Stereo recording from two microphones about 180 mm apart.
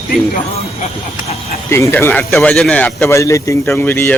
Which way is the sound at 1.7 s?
15° left (ahead or behind).